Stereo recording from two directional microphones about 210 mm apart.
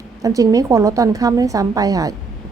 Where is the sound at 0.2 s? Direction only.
15° right (ahead or behind).